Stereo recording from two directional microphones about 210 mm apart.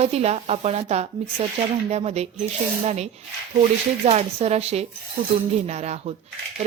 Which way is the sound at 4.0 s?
30° right (ahead or behind).